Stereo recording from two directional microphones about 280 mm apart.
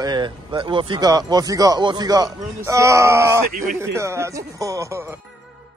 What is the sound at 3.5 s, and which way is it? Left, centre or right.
Speech, right.